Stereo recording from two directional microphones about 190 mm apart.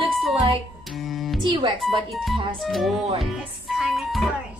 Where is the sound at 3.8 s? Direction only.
Centre (ahead or behind).